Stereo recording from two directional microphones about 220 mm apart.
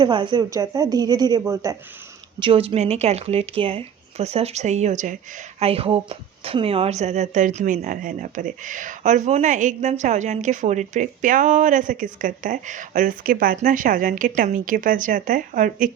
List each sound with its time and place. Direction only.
0.0 s a woman's voice: 20° right (ahead or behind); by 15.9 s 35° right (ahead or behind)